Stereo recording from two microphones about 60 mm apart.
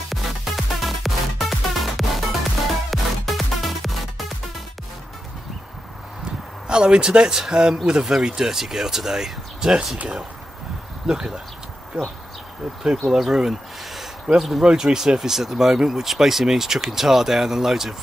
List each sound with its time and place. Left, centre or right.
0.1 s music: centre
6.7 s speech: centre
11.1 s speech: centre
12.8 s speech: centre